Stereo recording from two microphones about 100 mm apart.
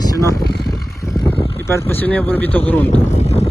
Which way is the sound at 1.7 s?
20° left (ahead or behind).